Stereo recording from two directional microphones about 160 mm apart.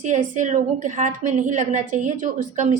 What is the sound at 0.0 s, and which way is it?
A woman's voice, 50° right (ahead or behind).